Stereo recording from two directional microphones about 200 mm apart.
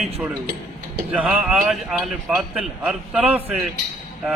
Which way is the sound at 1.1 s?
5° right (ahead or behind).